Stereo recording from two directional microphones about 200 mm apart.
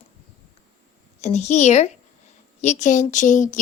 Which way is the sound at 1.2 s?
35° left (ahead or behind).